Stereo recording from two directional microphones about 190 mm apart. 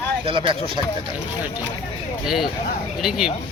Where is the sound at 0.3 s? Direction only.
25° right (ahead or behind).